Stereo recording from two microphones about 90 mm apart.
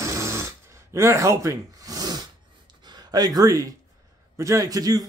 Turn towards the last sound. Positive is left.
turn(degrees=-45)  # may be behind; listen again after turning